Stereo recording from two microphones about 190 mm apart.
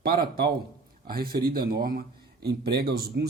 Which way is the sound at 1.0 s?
55° right (ahead or behind).